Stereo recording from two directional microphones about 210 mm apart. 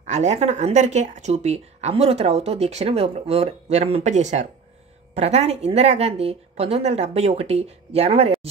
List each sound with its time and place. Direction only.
0.0 s a woman's voice: 35° right (ahead or behind)